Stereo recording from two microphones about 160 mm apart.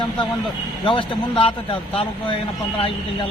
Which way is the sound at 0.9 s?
35° left (ahead or behind).